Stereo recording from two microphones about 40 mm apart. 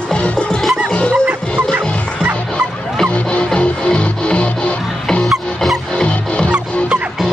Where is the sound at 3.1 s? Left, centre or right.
Left.